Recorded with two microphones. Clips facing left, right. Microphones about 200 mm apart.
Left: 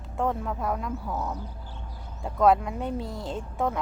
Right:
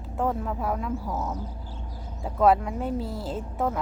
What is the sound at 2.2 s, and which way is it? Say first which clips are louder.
Speech: even; 5° right (ahead or behind).